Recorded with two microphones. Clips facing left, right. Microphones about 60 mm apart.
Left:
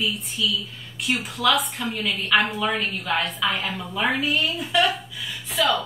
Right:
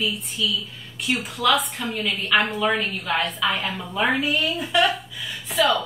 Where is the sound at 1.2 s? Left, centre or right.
Centre.